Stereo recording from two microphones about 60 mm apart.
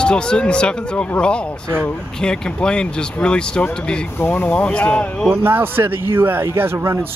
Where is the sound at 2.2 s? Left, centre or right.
Centre.